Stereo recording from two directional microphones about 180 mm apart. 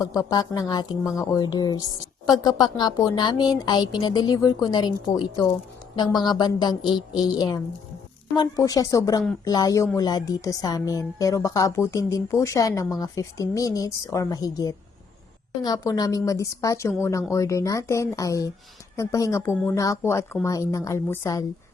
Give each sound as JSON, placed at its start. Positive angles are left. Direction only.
{"t": 0.0, "sound": "speech", "side_deg": 20}